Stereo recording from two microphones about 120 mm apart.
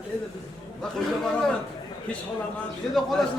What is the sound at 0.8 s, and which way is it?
Speech, 5° left (ahead or behind).